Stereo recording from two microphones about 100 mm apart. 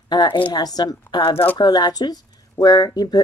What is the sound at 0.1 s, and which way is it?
A woman's voice, 45° left (ahead or behind).